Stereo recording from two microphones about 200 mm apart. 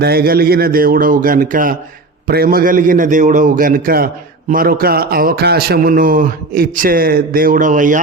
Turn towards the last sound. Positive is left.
turn(degrees=-40)  # may be behind; listen again after turning